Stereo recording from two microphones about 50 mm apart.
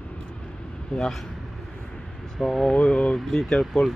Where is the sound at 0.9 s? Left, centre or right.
Centre.